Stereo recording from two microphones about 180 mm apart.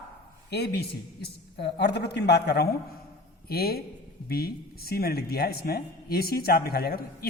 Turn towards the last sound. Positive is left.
turn(degrees=60)  # may be behind; listen again after turning